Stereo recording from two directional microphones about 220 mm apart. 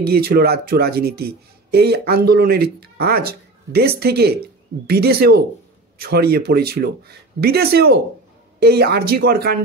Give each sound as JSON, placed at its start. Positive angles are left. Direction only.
{"t": 0.0, "sound": "speech", "side_deg": -45}